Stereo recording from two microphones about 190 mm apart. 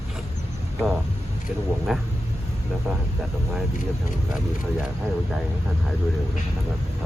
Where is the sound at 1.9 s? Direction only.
Centre (ahead or behind).